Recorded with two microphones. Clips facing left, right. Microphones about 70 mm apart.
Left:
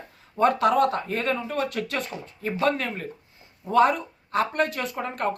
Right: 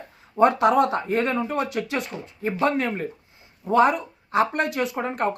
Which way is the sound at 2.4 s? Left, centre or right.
Right.